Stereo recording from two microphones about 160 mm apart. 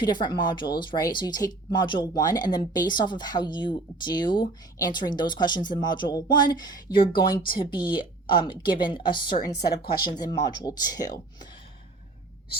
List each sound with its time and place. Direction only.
0.0 s speech: 30° left (ahead or behind)
7.2 s speech: 60° left (ahead or behind)
7.9 s speech: 30° left (ahead or behind)